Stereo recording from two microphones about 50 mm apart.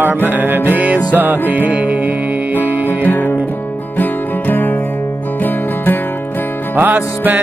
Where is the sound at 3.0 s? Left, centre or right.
Left.